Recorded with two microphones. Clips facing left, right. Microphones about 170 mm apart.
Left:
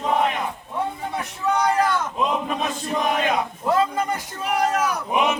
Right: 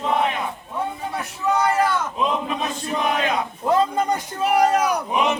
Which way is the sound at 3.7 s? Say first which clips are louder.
Right 2 dB; 20° right (ahead or behind).